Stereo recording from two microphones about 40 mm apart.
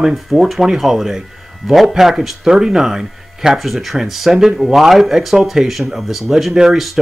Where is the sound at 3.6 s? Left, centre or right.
Centre.